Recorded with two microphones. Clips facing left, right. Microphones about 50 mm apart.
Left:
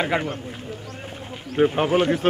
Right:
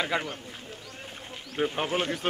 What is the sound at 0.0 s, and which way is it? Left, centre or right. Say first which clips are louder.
Speech: left 6 dB; left.